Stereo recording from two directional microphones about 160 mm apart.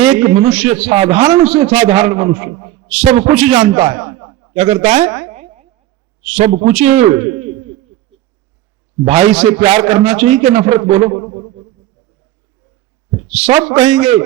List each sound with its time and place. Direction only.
0.0 s a man's voice: 40° right (ahead or behind)
4.0 s a sound: 25° right (ahead or behind)
4.5 s a man's voice: 40° right (ahead or behind)
7.3 s hoot: 40° right (ahead or behind)
9.0 s a man's voice: 40° right (ahead or behind)
13.3 s a man's voice: 40° right (ahead or behind)